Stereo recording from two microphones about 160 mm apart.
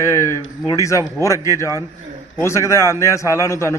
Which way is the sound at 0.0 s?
20° left (ahead or behind).